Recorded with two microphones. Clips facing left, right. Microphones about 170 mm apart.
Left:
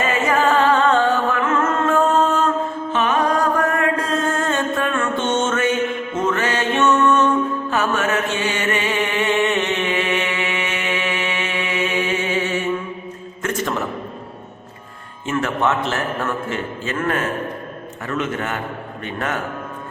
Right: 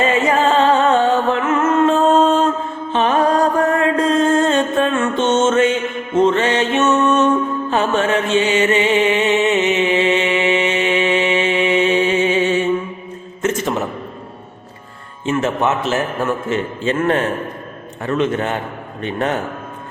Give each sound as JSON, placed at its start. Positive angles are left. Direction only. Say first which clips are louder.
{"t": 0.0, "sound": "music", "louder": "right 3 dB", "side_deg": -25}
{"t": 2.9, "sound": "mantra", "louder": "right 4 dB", "side_deg": -30}
{"t": 4.4, "sound": "music", "louder": "right 6 dB", "side_deg": -25}
{"t": 7.7, "sound": "mantra", "louder": "right 6 dB", "side_deg": -30}
{"t": 13.4, "sound": "a sound", "louder": "right 4 dB", "side_deg": -20}
{"t": 15.3, "sound": "music", "louder": "right 3 dB", "side_deg": -20}
{"t": 15.9, "sound": "a man's voice", "louder": "right 4 dB", "side_deg": -20}